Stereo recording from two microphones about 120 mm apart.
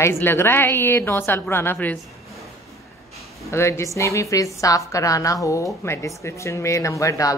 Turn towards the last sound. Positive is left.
turn(degrees=25)  # may be behind; listen again after turning